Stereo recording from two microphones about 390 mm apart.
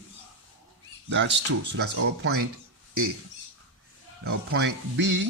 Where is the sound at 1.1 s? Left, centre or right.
Right.